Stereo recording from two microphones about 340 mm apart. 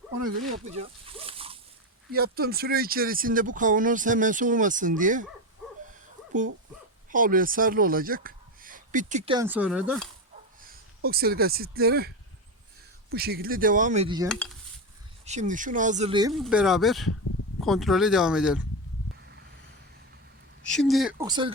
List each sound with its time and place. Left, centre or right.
0.8 s a sound: centre
2.1 s speech: right
7.1 s speech: right; by 10.1 s centre
11.0 s speech: right
14.3 s speech: centre
15.2 s speech: right
16.3 s speech: centre
20.7 s speech: centre